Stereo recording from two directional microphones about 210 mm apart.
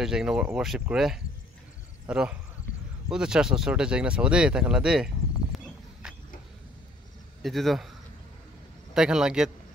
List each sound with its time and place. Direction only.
0.0 s speech: 5° right (ahead or behind)
7.4 s speech: centre (ahead or behind)
8.9 s speech: 5° right (ahead or behind)